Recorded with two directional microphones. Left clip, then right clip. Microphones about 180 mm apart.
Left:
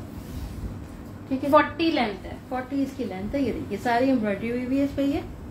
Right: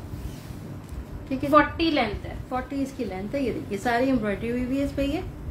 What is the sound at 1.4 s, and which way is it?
A woman's voice, 30° right (ahead or behind).